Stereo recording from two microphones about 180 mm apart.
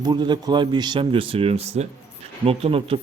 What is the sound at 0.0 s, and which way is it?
A man's voice, 25° right (ahead or behind).